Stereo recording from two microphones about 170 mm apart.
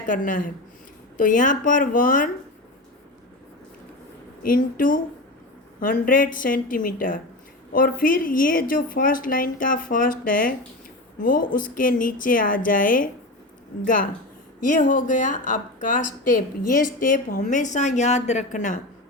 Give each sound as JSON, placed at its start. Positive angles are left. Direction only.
{"t": 0.1, "sound": "speech", "side_deg": 50}
{"t": 4.4, "sound": "a woman's voice", "side_deg": 55}